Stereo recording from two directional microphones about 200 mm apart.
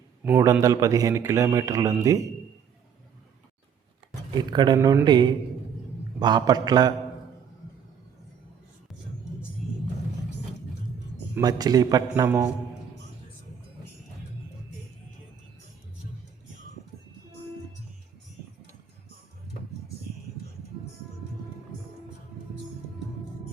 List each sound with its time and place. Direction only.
0.3 s speech: 15° right (ahead or behind)
4.4 s a man's voice: 20° right (ahead or behind)
11.3 s a man's voice: 20° right (ahead or behind)